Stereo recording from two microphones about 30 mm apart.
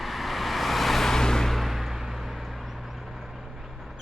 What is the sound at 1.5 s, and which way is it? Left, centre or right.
Vehicle, centre.